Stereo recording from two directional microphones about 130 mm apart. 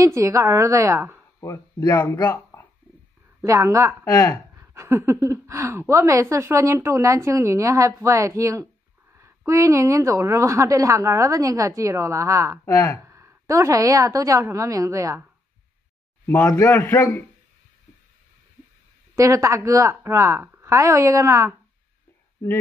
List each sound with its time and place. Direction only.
0.0 s speech: 25° right (ahead or behind)
1.4 s speech: 25° left (ahead or behind)
1.9 s speech: 15° left (ahead or behind)
3.4 s speech: 25° right (ahead or behind)
4.0 s a man's voice: 20° left (ahead or behind)
4.7 s speech: 20° right (ahead or behind)
12.6 s a man's voice: 20° left (ahead or behind)
13.0 s speech: 20° right (ahead or behind)
16.4 s a man's voice: 25° left (ahead or behind)
19.1 s speech: 25° right (ahead or behind)